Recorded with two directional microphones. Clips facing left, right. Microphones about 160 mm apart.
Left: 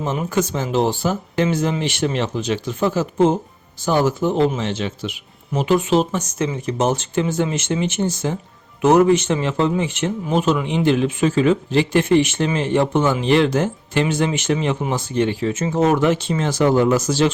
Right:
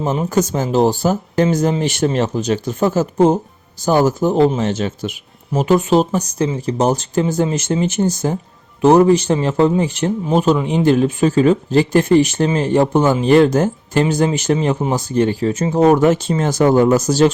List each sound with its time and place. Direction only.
0.0 s speech: 40° right (ahead or behind)